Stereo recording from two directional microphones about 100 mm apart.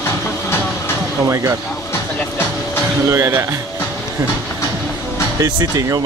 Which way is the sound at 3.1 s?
25° right (ahead or behind).